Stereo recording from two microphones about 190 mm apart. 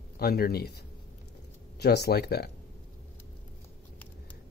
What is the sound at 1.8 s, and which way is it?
Speech, 60° left (ahead or behind).